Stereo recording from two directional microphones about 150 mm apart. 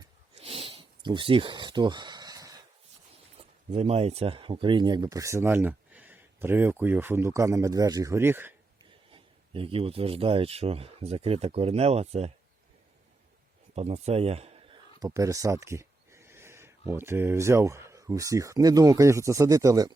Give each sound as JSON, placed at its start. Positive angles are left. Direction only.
{"t": 0.3, "sound": "a sound", "side_deg": -40}
{"t": 3.3, "sound": "speech", "side_deg": -40}
{"t": 8.8, "sound": "a man's voice", "side_deg": -35}
{"t": 13.7, "sound": "speech", "side_deg": -45}
{"t": 14.9, "sound": "speech", "side_deg": -25}